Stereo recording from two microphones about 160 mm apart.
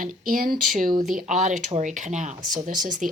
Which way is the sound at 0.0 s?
60° right (ahead or behind).